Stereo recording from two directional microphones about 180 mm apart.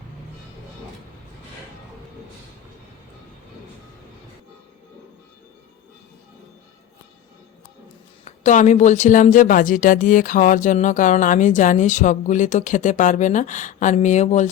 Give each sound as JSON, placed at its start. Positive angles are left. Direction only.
{"t": 8.2, "sound": "speech", "side_deg": 40}